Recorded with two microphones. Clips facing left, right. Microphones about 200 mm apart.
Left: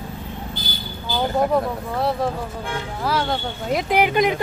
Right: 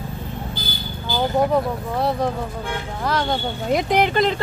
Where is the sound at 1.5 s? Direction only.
Centre (ahead or behind).